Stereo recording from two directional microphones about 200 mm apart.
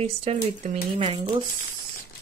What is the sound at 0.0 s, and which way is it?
Speech, 30° right (ahead or behind).